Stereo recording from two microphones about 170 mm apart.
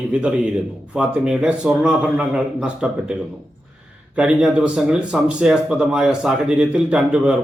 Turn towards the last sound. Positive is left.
turn(degrees=-5)  # may be behind; listen again after turning